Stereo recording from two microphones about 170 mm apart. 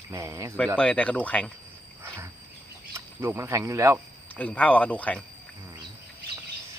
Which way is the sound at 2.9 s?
15° right (ahead or behind).